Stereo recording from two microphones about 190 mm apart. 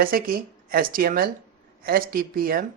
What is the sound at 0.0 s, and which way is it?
A woman's voice, 50° right (ahead or behind).